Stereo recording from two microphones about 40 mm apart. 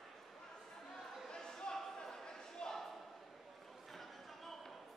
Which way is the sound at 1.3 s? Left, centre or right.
Centre.